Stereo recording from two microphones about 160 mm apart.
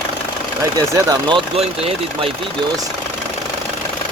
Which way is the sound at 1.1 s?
30° right (ahead or behind).